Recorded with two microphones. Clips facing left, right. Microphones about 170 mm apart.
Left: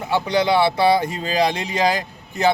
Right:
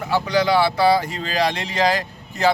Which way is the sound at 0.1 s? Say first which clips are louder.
Even; 25° left (ahead or behind).